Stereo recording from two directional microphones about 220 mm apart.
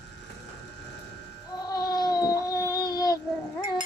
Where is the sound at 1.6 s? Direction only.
15° left (ahead or behind).